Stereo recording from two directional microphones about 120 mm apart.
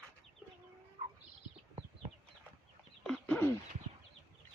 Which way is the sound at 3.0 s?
15° left (ahead or behind).